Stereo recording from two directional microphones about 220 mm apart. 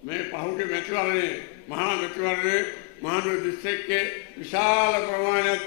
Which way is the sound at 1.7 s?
15° left (ahead or behind).